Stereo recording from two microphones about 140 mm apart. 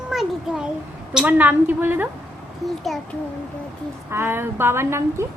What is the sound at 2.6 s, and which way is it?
Speech, centre (ahead or behind).